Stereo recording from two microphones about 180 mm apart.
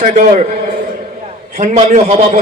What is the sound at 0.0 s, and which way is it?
A man's voice, 45° right (ahead or behind).